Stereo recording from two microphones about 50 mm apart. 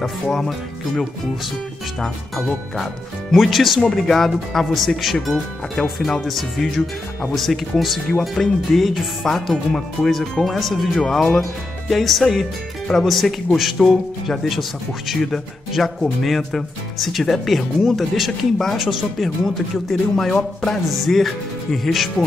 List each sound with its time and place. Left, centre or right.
0.0 s speech: centre
2.0 s speech: centre
20.2 s speech: centre
20.9 s speech: centre